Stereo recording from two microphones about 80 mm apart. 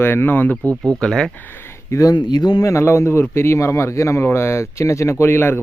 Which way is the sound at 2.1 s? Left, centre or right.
Left.